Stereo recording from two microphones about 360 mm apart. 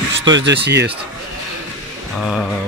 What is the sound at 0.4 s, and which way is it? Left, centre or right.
Speech, right.